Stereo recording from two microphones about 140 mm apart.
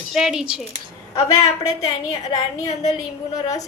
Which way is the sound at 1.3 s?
25° left (ahead or behind).